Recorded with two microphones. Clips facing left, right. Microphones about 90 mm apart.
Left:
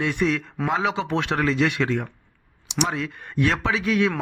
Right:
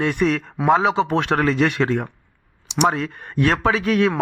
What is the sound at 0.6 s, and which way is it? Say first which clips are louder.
Speech: right 7 dB; 40° right (ahead or behind).